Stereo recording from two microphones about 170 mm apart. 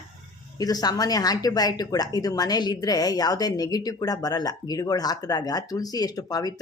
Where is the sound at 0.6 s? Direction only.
20° left (ahead or behind).